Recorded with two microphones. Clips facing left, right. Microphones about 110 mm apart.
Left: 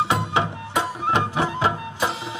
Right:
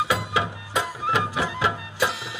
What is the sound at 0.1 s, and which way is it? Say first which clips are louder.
Music: left 2 dB; 30° left (ahead or behind).